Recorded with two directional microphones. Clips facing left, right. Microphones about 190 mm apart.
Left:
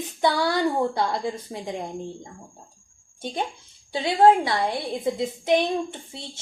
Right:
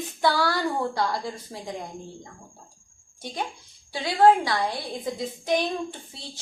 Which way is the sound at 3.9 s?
20° left (ahead or behind).